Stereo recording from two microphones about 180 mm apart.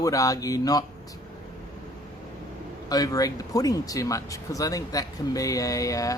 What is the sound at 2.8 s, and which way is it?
Speech, 20° left (ahead or behind).